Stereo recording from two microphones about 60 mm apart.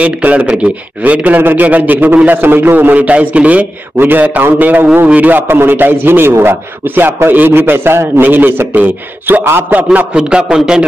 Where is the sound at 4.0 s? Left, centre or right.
Right.